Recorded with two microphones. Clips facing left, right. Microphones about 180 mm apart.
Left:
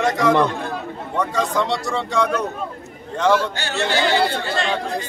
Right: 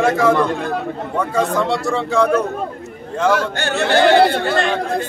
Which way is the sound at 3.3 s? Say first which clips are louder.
Right 2 dB; 55° right (ahead or behind).